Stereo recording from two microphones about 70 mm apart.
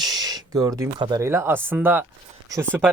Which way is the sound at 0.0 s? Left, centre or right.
Right.